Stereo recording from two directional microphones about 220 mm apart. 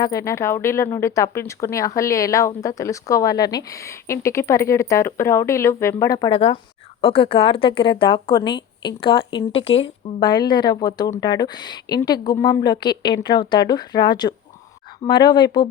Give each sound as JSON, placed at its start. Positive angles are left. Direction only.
{"t": 0.0, "sound": "speech", "side_deg": 15}